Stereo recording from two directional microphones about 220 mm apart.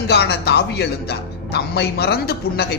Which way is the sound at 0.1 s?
50° left (ahead or behind).